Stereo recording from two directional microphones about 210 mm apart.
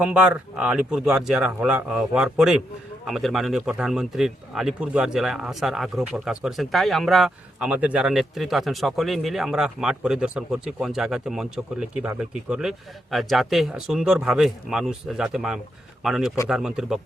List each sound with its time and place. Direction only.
0.0 s speech: 5° right (ahead or behind)